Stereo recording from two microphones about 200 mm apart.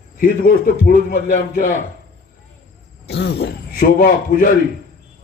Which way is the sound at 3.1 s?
55° left (ahead or behind).